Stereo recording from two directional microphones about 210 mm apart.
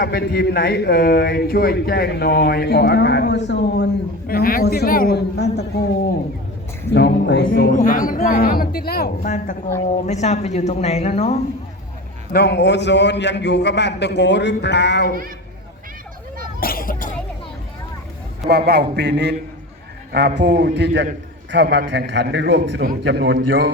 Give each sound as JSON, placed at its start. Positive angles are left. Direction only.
{"t": 0.0, "sound": "a man's voice", "side_deg": 50}
{"t": 4.3, "sound": "a man's voice", "side_deg": 45}
{"t": 6.9, "sound": "a man's voice", "side_deg": 55}
{"t": 12.3, "sound": "a man's voice", "side_deg": 50}
{"t": 16.6, "sound": "a sound", "side_deg": 45}
{"t": 18.4, "sound": "a man's voice", "side_deg": -50}
{"t": 22.8, "sound": "a man's voice", "side_deg": -45}